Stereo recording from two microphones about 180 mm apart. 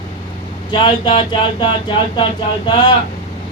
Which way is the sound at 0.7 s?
25° left (ahead or behind).